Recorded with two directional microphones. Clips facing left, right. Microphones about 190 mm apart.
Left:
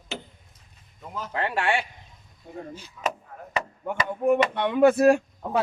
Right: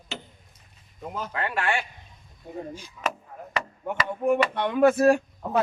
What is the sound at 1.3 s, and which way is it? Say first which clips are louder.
Speech: left 3 dB; 30° left (ahead or behind).